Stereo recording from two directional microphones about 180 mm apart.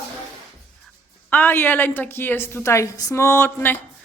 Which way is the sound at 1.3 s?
10° left (ahead or behind).